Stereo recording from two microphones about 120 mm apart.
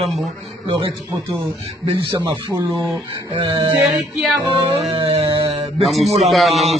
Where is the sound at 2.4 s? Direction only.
40° right (ahead or behind).